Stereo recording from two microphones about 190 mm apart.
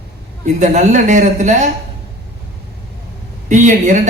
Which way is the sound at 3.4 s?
40° right (ahead or behind).